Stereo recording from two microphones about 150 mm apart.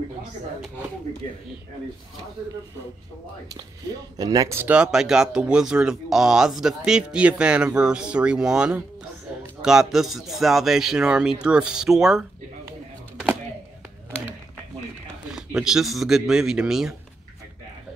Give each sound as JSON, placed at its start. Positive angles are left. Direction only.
{"t": 4.2, "sound": "speech", "side_deg": -25}
{"t": 15.3, "sound": "speech", "side_deg": -5}